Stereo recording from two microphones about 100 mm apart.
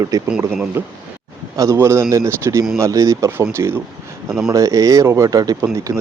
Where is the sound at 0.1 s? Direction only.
35° right (ahead or behind).